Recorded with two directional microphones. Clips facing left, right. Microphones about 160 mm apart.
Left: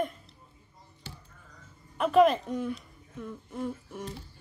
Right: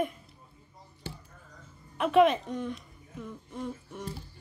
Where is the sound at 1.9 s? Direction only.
Centre (ahead or behind).